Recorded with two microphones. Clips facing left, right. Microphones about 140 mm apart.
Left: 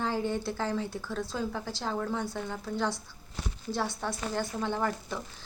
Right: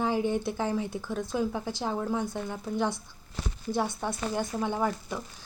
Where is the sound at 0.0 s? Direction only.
15° right (ahead or behind).